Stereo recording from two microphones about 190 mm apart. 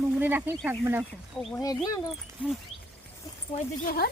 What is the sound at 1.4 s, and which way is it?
Speech, 5° left (ahead or behind).